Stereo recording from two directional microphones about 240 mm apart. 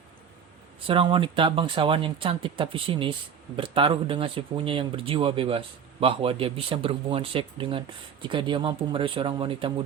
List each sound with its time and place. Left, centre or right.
0.9 s speech: right